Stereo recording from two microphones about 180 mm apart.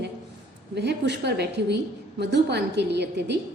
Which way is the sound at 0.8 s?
65° right (ahead or behind).